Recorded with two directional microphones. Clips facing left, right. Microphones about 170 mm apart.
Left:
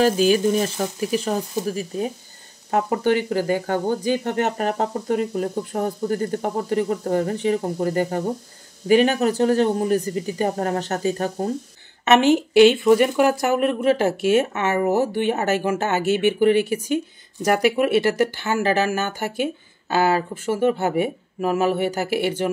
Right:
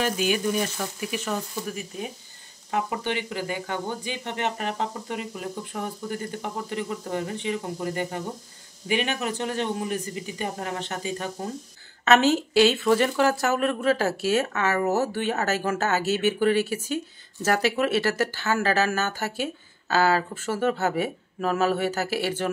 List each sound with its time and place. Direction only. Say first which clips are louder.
0.0 s speech: left 8 dB; 35° left (ahead or behind)
12.0 s speech: left 4 dB; 15° left (ahead or behind)